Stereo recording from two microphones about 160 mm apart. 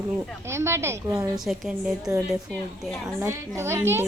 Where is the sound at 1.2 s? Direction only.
Centre (ahead or behind).